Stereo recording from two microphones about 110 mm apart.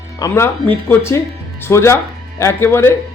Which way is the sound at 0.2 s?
25° left (ahead or behind).